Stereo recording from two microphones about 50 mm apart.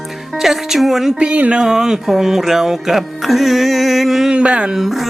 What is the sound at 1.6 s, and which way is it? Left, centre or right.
Music, centre.